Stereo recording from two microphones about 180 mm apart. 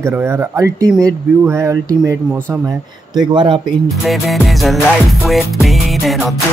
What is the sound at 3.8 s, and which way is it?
Music, centre (ahead or behind).